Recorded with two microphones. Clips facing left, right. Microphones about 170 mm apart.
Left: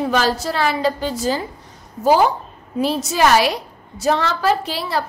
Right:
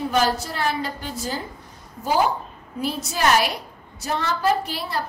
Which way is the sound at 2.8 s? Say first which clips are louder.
Left 6 dB; 90° left.